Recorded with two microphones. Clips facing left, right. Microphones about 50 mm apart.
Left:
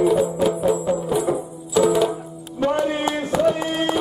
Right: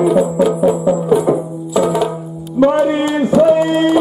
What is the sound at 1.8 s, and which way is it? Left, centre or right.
Music, centre.